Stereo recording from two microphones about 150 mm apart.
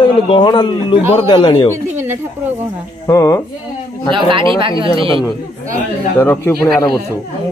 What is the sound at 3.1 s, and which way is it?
Speech, 20° left (ahead or behind).